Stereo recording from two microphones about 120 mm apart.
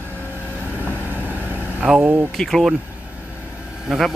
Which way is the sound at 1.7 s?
10° right (ahead or behind).